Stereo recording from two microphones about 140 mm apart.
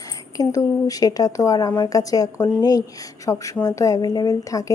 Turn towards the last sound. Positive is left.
turn(degrees=25)  # may be behind; listen again after turning